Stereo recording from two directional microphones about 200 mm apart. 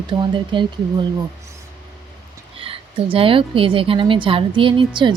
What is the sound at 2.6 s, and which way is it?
Speech, 25° right (ahead or behind).